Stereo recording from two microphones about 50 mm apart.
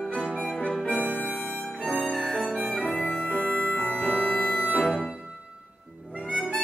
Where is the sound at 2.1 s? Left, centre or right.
Centre.